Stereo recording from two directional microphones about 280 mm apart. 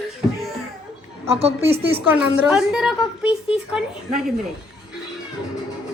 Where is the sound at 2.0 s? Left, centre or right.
Centre.